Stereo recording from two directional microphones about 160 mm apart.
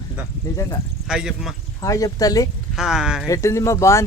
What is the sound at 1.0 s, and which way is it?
Speech, 5° right (ahead or behind).